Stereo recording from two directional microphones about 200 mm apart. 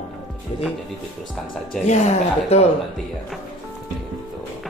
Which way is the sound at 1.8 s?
35° left (ahead or behind).